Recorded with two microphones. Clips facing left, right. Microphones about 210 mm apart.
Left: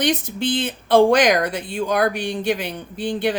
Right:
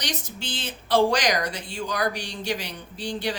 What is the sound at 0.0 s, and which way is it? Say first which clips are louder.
Speech: left 12 dB; 55° left (ahead or behind).